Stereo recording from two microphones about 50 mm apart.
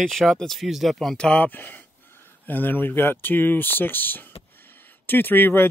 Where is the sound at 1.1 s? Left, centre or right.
Centre.